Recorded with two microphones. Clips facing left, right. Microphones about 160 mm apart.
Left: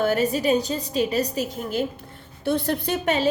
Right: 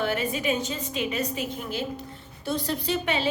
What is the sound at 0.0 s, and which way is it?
A woman's voice, 40° left (ahead or behind).